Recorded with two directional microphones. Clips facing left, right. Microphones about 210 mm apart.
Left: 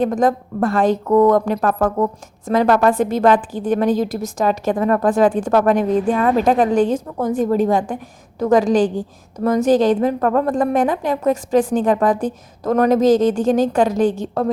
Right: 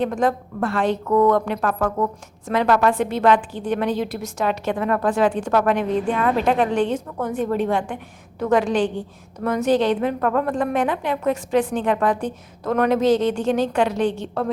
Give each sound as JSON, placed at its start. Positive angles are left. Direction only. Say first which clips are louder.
{"t": 0.0, "sound": "a woman's voice", "louder": "left 4 dB", "side_deg": 40}